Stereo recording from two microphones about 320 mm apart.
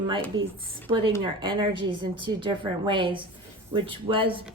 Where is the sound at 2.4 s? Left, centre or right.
Centre.